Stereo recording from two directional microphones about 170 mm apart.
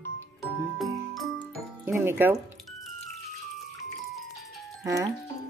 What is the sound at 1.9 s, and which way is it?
Speech, 15° right (ahead or behind).